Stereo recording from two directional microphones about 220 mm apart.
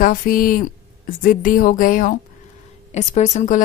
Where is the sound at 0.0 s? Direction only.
40° left (ahead or behind).